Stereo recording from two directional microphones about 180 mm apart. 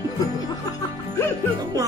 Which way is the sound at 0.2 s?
20° left (ahead or behind).